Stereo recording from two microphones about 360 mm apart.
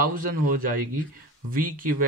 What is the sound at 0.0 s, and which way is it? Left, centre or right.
Speech, right.